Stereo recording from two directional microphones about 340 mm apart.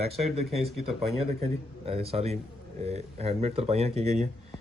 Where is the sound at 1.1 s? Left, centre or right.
Centre.